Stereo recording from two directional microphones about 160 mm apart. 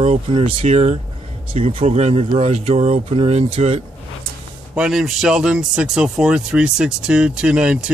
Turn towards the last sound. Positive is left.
turn(degrees=-5)  # may be behind; listen again after turning